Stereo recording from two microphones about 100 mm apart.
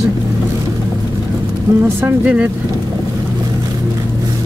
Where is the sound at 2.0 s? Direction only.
20° right (ahead or behind).